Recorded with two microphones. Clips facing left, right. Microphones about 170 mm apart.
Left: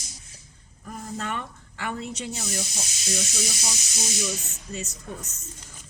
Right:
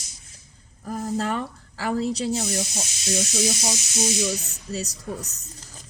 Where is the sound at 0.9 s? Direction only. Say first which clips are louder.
Right 7 dB; 35° right (ahead or behind).